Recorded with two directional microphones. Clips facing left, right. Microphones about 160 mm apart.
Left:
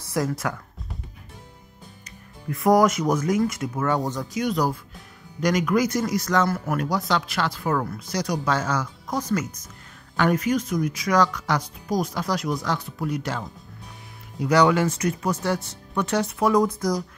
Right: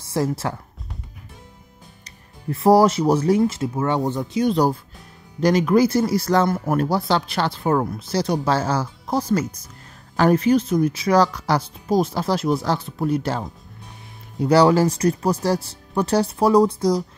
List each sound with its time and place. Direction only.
0.0 s speech: 25° right (ahead or behind)
2.5 s speech: 30° right (ahead or behind)